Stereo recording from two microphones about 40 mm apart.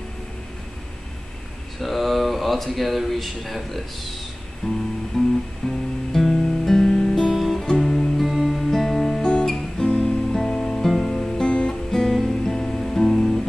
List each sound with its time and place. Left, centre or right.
1.8 s speech: centre
4.6 s guitar: centre
5.7 s music: centre
7.3 s music: centre; by 11.7 s left
11.9 s music: centre